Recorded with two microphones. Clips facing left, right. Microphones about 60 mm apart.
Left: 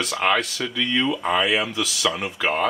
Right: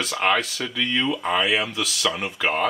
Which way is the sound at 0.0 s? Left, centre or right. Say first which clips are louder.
Even; centre.